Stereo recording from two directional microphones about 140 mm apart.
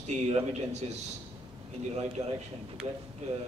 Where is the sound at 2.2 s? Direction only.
25° right (ahead or behind).